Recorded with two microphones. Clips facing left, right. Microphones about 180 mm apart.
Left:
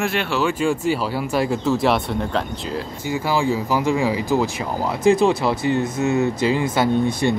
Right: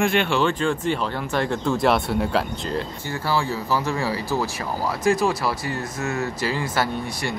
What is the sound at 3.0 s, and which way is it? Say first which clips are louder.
Speech: left 6 dB; 15° left (ahead or behind).